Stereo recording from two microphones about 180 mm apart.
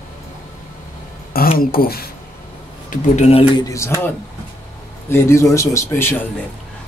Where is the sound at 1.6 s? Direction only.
55° left (ahead or behind).